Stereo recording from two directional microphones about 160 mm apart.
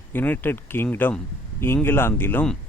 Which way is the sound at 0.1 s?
10° left (ahead or behind).